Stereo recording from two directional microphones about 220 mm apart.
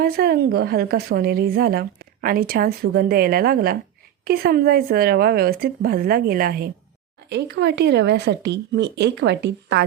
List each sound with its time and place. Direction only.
0.0 s a woman's voice: 45° right (ahead or behind)